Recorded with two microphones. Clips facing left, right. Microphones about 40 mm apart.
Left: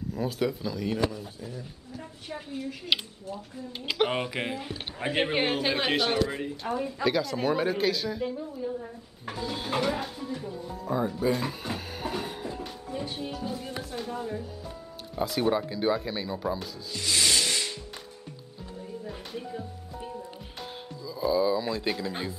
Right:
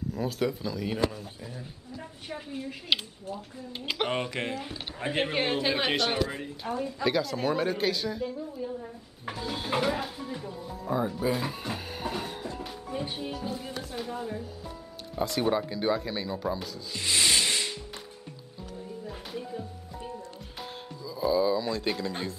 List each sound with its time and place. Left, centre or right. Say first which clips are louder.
0.1 s speech: left 1 dB; centre
8.2 s speech: left 2 dB; centre
8.5 s speech: left 2 dB; centre
12.9 s speech: even; centre
16.9 s rub: even; right
21.0 s speech: even; centre